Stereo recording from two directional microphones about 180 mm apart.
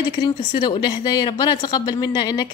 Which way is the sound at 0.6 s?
25° left (ahead or behind).